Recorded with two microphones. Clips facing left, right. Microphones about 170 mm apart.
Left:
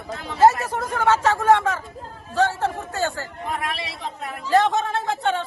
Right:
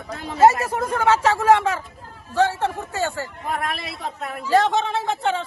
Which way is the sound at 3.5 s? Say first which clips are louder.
Right 1 dB; 50° right (ahead or behind).